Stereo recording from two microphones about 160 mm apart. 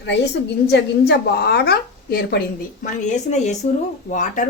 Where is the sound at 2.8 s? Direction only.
50° left (ahead or behind).